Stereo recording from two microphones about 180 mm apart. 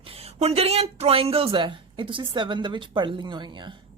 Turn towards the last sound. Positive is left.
turn(degrees=-25)  # may be behind; listen again after turning